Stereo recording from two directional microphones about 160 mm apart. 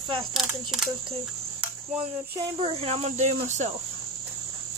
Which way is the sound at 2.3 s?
35° right (ahead or behind).